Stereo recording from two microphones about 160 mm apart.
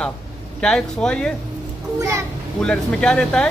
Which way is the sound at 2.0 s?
20° right (ahead or behind).